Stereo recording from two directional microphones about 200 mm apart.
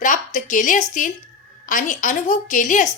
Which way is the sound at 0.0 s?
40° left (ahead or behind).